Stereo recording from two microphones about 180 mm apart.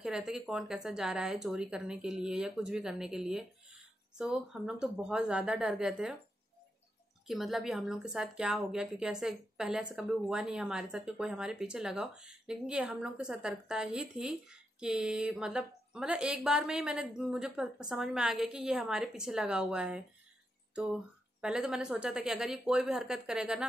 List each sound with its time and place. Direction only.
0.0 s a woman's voice: 5° right (ahead or behind)
7.2 s a woman's voice: centre (ahead or behind)